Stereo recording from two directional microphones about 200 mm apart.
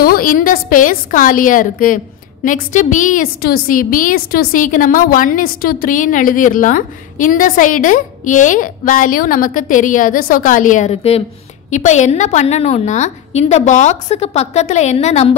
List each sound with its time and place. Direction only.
0.0 s a woman's voice: 45° left (ahead or behind)